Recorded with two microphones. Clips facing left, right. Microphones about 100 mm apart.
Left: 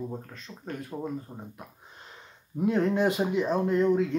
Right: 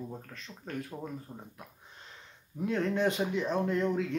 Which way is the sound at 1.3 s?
20° left (ahead or behind).